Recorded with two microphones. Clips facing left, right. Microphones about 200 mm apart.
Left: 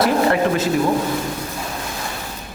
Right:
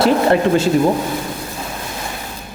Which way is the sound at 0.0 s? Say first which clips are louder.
Right 3 dB; 30° right (ahead or behind).